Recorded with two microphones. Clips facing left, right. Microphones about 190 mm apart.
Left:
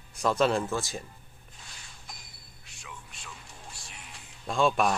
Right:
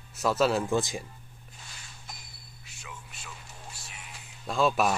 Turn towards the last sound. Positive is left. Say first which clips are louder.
# even
turn(degrees=0)  # may be behind; listen again after turning